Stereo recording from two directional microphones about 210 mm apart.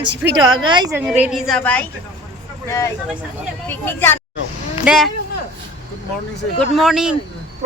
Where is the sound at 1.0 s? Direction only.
5° right (ahead or behind); by 4.2 s 10° left (ahead or behind).